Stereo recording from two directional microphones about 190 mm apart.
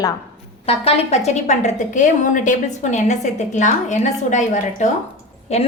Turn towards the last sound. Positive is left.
turn(degrees=30)  # may be behind; listen again after turning